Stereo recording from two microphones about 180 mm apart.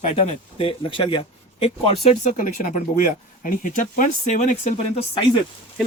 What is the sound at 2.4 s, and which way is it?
Speech, 50° left (ahead or behind).